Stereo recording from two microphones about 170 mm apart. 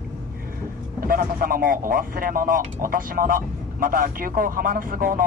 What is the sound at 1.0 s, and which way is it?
Speech, 55° right (ahead or behind).